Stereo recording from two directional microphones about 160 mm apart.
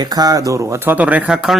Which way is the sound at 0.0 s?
25° right (ahead or behind).